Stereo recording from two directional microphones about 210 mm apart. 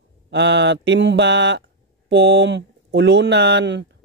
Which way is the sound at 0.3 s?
55° right (ahead or behind).